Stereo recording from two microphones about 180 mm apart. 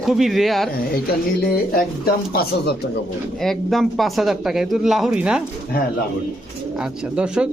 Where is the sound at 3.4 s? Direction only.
Centre (ahead or behind).